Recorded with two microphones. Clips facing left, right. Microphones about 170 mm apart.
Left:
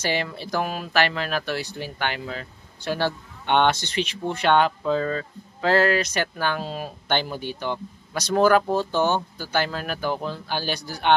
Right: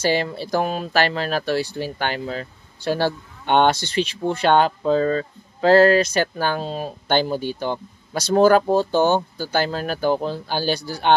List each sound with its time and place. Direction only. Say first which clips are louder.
0.0 s speech: right 5 dB; 35° right (ahead or behind)